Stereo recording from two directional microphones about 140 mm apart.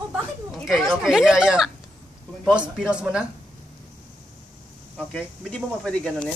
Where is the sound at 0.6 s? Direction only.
5° right (ahead or behind).